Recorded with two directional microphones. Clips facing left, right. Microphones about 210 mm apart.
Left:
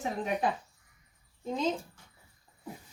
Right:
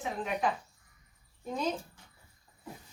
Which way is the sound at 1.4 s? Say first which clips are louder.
Left 3 dB; 20° left (ahead or behind).